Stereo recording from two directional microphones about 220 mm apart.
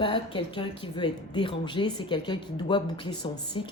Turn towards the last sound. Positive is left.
turn(degrees=20)  # may be behind; listen again after turning